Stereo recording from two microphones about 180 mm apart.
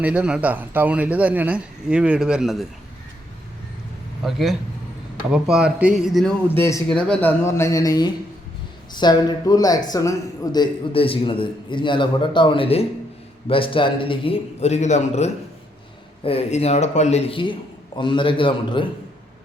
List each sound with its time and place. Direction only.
0.0 s a man's voice: 5° right (ahead or behind)
4.2 s speech: centre (ahead or behind)
6.5 s a man's voice: 15° left (ahead or behind)